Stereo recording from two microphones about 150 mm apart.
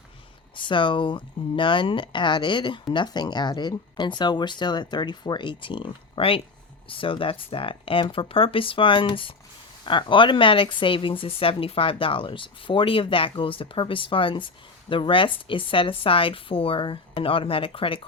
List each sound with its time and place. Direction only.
0.5 s speech: 35° left (ahead or behind)